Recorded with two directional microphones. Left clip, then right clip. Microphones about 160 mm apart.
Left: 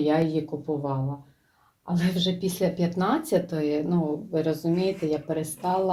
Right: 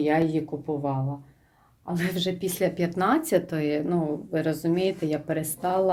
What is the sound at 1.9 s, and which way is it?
Speech, 40° right (ahead or behind).